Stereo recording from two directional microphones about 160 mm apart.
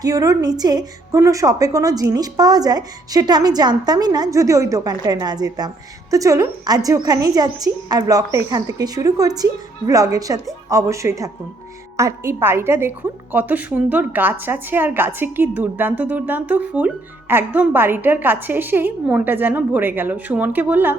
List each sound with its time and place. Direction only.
0.0 s a woman's voice: 20° right (ahead or behind)